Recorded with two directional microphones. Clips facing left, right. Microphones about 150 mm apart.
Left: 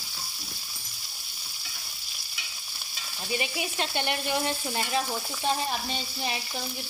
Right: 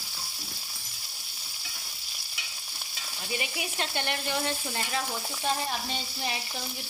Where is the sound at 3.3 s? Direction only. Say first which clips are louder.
Left 3 dB; 25° left (ahead or behind).